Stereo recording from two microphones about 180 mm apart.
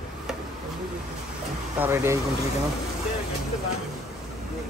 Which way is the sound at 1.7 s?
15° right (ahead or behind).